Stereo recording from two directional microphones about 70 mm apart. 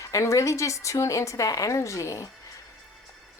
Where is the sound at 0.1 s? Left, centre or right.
Left.